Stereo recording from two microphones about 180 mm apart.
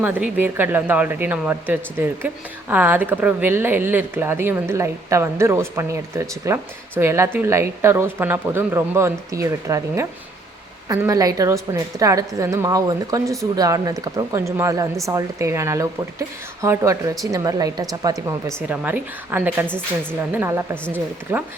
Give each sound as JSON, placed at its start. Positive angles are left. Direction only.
{"t": 0.0, "sound": "speech", "side_deg": -10}
{"t": 19.6, "sound": "a woman's voice", "side_deg": 5}
{"t": 20.3, "sound": "speech", "side_deg": -15}